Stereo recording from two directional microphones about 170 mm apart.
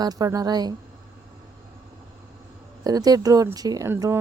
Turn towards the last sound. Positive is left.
turn(degrees=-15)  # may be behind; listen again after turning